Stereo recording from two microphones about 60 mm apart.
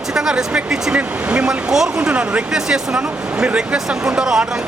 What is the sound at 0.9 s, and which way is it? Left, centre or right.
Speech, right.